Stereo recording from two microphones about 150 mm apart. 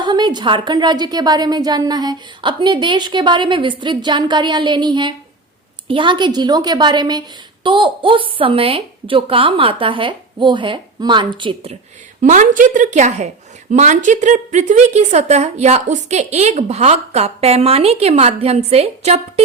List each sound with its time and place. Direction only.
0.0 s a woman's voice: 30° right (ahead or behind)
12.2 s a woman's voice: 60° right (ahead or behind); by 19.2 s 45° right (ahead or behind)